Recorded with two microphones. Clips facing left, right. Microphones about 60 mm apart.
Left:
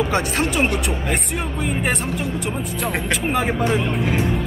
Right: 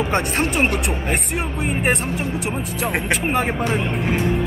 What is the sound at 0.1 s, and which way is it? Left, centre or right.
Speech, right.